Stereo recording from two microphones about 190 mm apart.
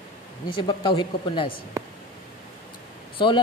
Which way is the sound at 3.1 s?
25° left (ahead or behind).